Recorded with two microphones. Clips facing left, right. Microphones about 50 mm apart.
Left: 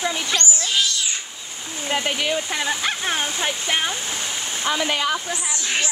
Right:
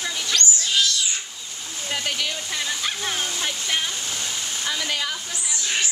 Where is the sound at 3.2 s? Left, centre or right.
Left.